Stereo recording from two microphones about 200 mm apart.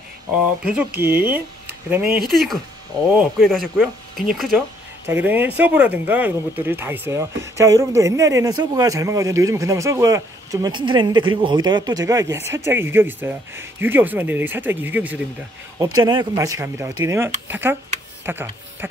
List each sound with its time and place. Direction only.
0.7 s speech: 5° right (ahead or behind)
5.0 s speech: 10° right (ahead or behind)
15.8 s speech: 20° right (ahead or behind)
18.2 s tick-tock: 10° right (ahead or behind)